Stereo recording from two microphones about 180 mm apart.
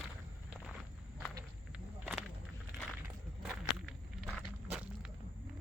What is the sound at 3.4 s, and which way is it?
Walk, centre (ahead or behind).